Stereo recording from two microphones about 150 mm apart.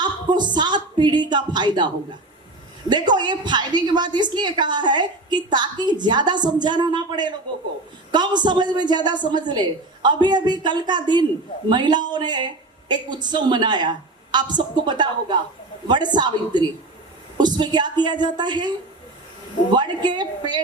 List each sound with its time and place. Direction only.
0.0 s a woman's voice: 30° right (ahead or behind)
2.9 s a woman's voice: 30° right (ahead or behind)
19.7 s a woman's voice: 30° right (ahead or behind)